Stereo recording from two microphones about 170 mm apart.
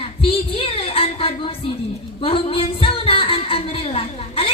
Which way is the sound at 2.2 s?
35° left (ahead or behind).